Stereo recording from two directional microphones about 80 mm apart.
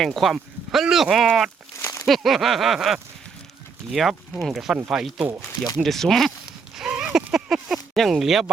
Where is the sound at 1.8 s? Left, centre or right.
Left.